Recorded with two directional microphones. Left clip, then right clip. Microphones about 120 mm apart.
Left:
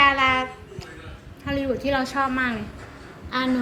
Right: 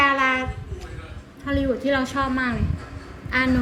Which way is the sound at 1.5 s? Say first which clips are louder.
Right 2 dB; 30° left (ahead or behind).